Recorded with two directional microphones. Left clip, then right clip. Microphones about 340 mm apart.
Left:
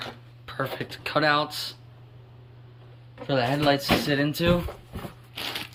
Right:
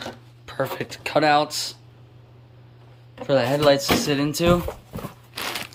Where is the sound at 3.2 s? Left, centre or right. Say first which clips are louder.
Right 5 dB; centre.